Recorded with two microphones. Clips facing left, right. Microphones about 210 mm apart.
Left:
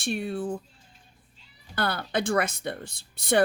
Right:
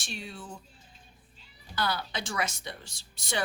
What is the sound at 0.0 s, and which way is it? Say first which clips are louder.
Speech: left 13 dB; 55° left (ahead or behind).